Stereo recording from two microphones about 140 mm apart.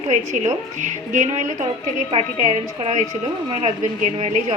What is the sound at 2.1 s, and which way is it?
A woman's voice, 50° right (ahead or behind).